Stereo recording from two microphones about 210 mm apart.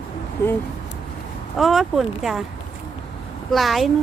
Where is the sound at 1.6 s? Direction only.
Centre (ahead or behind).